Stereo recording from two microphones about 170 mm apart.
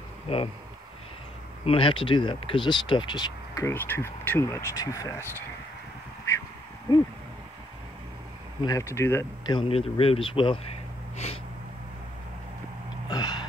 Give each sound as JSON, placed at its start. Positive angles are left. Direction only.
{"t": 0.3, "sound": "speech", "side_deg": 35}
{"t": 1.6, "sound": "speech", "side_deg": 30}
{"t": 8.5, "sound": "speech", "side_deg": 20}
{"t": 9.6, "sound": "speech", "side_deg": 35}
{"t": 13.1, "sound": "a sound", "side_deg": 25}